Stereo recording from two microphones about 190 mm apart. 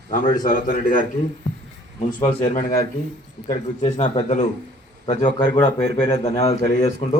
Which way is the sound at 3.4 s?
35° left (ahead or behind).